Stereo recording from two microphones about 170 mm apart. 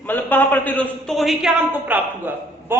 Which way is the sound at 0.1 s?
10° left (ahead or behind).